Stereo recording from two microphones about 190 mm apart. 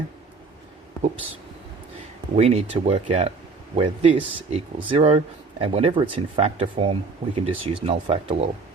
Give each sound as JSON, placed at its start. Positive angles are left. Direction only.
{"t": 2.3, "sound": "speech", "side_deg": -35}